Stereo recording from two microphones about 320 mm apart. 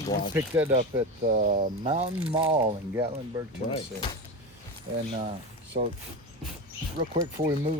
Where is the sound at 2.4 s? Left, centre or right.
Centre.